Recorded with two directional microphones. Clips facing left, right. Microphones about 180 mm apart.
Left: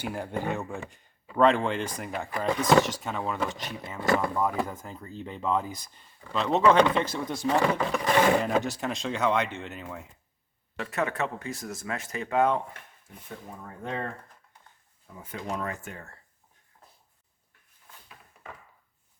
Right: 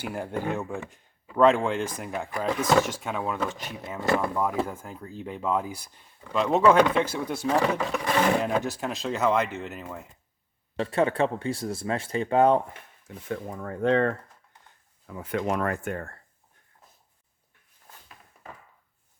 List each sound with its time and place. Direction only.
0.0 s speech: 5° right (ahead or behind)
10.8 s speech: 30° right (ahead or behind)
13.2 s speech: 90° right
15.0 s speech: 75° right (ahead or behind); by 16.1 s 55° right (ahead or behind)